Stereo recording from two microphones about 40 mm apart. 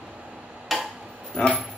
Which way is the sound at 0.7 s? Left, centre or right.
Centre.